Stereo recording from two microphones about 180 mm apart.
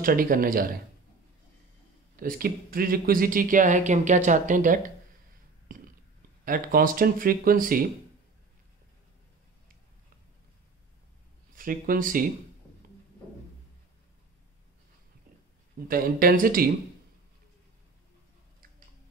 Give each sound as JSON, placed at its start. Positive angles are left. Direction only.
{"t": 0.0, "sound": "speech", "side_deg": -50}
{"t": 2.1, "sound": "speech", "side_deg": -50}
{"t": 6.4, "sound": "speech", "side_deg": -50}
{"t": 11.5, "sound": "speech", "side_deg": -50}
{"t": 15.9, "sound": "speech", "side_deg": -50}